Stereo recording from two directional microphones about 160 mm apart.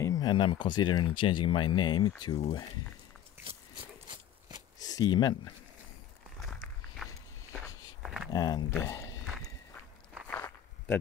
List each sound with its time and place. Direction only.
0.0 s speech: 25° left (ahead or behind)
3.4 s a sound: 30° right (ahead or behind)
4.7 s speech: 25° left (ahead or behind)
7.0 s walk: centre (ahead or behind)
8.0 s a sound: 5° right (ahead or behind)
8.3 s speech: 25° left (ahead or behind)
10.2 s walk: 10° left (ahead or behind)